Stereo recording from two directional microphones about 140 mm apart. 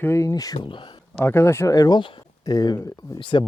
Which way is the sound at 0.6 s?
35° left (ahead or behind).